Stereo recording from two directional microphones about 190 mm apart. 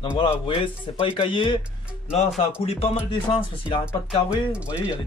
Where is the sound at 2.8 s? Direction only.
30° left (ahead or behind).